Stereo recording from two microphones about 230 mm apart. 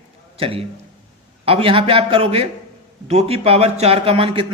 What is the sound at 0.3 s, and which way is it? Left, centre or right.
A man's voice, right.